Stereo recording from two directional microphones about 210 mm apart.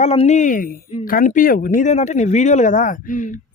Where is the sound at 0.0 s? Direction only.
30° left (ahead or behind).